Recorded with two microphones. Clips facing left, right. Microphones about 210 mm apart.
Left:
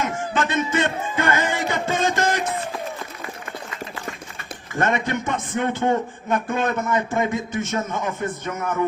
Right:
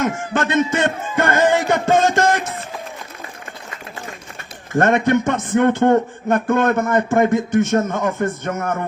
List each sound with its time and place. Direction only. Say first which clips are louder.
0.0 s music: right 4 dB; 60° right (ahead or behind)
4.7 s speech: right 7 dB; 50° right (ahead or behind)